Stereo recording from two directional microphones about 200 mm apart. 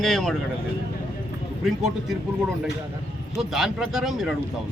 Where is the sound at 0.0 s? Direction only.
Centre (ahead or behind).